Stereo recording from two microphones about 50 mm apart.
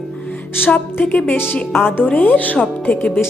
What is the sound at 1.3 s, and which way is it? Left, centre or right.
Speech, left.